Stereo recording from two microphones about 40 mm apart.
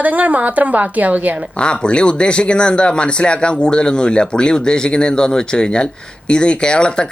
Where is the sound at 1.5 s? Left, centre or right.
Left.